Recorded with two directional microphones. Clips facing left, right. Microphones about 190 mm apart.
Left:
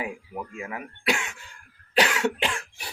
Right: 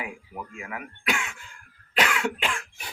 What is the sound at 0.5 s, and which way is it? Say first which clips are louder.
Speech: left 2 dB; 30° left (ahead or behind).